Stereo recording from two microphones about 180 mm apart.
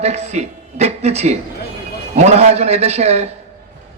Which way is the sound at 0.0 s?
35° right (ahead or behind).